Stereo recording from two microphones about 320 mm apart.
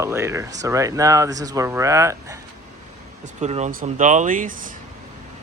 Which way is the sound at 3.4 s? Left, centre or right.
Right.